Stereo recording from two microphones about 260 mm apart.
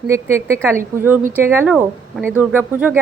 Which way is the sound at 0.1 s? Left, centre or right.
Centre.